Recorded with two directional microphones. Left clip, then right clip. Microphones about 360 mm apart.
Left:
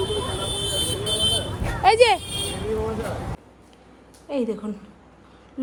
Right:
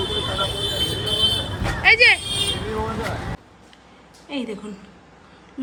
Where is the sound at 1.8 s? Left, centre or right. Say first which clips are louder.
Right 2 dB; left.